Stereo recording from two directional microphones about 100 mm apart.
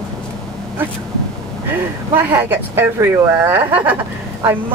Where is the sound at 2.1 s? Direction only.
20° right (ahead or behind).